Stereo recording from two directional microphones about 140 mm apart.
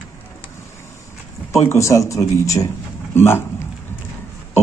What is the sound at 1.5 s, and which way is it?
A man's voice, 20° left (ahead or behind).